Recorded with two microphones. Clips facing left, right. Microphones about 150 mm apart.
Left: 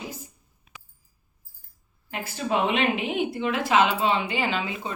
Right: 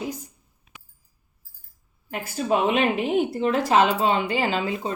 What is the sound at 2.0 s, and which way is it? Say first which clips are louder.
A woman's voice: right 4 dB; 45° right (ahead or behind).